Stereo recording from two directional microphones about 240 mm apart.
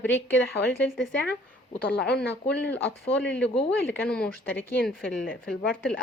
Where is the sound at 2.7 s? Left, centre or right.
Centre.